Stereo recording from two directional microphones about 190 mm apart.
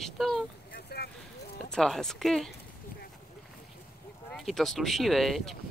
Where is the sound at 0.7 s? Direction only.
55° left (ahead or behind).